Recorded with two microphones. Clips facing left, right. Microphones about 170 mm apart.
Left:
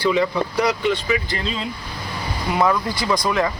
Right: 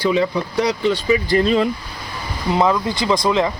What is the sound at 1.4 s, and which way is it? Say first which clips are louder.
Speech: right 11 dB; 55° right (ahead or behind).